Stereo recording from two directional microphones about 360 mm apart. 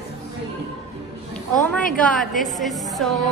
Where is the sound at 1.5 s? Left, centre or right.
Centre.